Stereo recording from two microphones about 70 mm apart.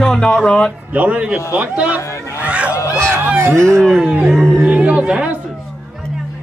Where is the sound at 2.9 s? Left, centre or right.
Right.